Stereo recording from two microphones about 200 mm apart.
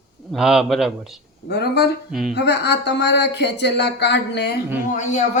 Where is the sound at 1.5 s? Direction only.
55° left (ahead or behind).